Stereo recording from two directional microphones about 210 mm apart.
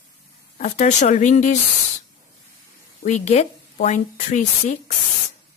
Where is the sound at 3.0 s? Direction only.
35° left (ahead or behind).